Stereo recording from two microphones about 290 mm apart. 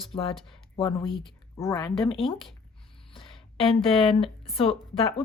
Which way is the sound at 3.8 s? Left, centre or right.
Centre.